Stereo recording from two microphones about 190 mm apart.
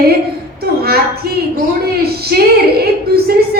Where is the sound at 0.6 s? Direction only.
55° right (ahead or behind).